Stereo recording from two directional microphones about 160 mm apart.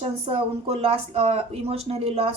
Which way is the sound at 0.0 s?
40° right (ahead or behind).